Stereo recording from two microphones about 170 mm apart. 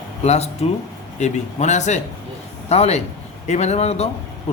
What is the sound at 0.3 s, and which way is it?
A man's voice, 40° left (ahead or behind).